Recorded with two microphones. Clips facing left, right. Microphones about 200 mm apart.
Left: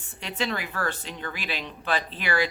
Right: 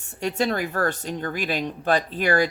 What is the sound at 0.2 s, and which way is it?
Speech, 45° right (ahead or behind).